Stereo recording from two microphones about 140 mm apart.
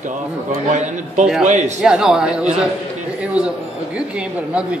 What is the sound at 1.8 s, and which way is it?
A man's voice, 5° right (ahead or behind).